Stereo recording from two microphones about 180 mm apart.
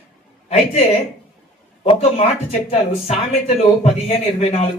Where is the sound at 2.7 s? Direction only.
35° left (ahead or behind).